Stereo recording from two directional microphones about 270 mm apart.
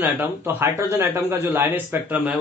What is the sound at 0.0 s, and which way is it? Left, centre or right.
A man's voice, centre.